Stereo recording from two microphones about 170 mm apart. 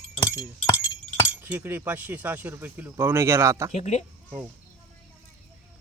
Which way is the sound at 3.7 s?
40° left (ahead or behind).